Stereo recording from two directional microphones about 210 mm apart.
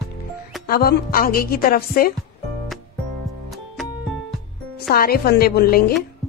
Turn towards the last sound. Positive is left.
turn(degrees=45)  # may be behind; listen again after turning